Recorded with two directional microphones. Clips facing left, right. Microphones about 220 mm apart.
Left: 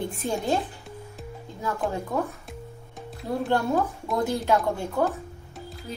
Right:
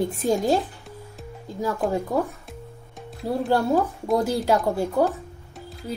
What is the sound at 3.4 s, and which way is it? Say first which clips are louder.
A woman's voice: right 3 dB; 35° right (ahead or behind).